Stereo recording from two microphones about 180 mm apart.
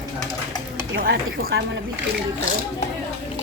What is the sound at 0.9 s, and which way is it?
Speech, 60° right (ahead or behind).